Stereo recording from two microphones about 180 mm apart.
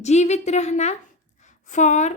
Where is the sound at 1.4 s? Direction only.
40° left (ahead or behind).